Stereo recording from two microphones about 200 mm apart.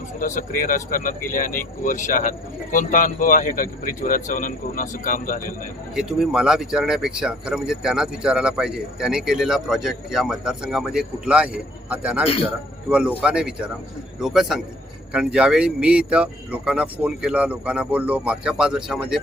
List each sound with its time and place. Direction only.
0.2 s speech: 40° left (ahead or behind)
5.9 s speech: 5° right (ahead or behind)